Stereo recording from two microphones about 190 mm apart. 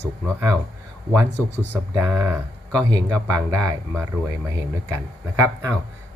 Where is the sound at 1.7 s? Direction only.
10° right (ahead or behind).